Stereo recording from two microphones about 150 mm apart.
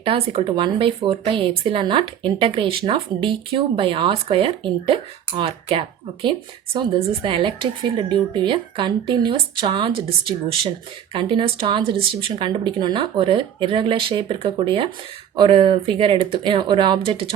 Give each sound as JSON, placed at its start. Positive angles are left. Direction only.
{"t": 0.0, "sound": "speech", "side_deg": -35}
{"t": 11.1, "sound": "speech", "side_deg": -35}